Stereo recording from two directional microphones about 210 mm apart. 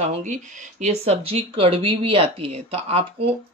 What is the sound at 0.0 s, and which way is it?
Speech, 35° right (ahead or behind).